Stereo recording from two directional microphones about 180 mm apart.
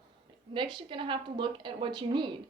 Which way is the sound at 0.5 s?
25° right (ahead or behind).